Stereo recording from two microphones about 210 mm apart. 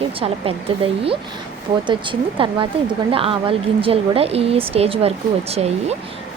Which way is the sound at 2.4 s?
25° right (ahead or behind).